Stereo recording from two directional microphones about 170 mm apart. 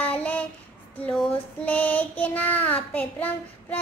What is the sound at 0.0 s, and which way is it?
Child singing, 10° left (ahead or behind).